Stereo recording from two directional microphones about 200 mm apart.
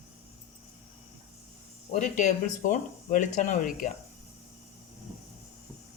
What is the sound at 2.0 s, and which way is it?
Speech, 35° left (ahead or behind).